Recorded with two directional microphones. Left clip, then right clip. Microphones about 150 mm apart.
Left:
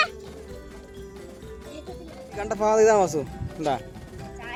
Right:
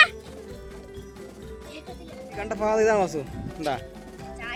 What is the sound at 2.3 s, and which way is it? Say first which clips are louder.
Speech: left 3 dB; 30° left (ahead or behind).